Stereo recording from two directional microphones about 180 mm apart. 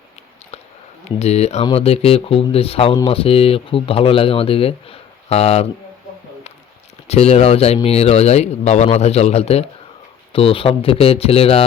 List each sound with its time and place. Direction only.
1.2 s speech: 35° left (ahead or behind)
7.1 s speech: 35° left (ahead or behind)